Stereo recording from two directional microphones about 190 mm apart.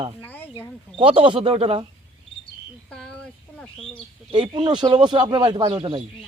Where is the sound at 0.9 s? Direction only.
30° right (ahead or behind).